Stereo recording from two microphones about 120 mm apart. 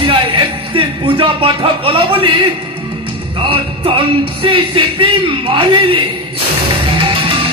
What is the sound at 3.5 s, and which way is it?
Speech, 50° right (ahead or behind).